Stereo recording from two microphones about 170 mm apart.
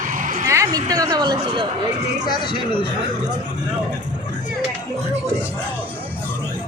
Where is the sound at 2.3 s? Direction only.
30° left (ahead or behind).